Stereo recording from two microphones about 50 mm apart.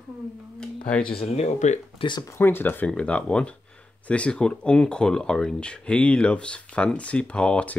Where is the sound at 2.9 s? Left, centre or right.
Left.